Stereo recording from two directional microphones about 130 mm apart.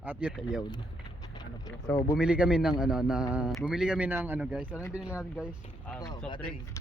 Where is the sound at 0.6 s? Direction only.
35° left (ahead or behind).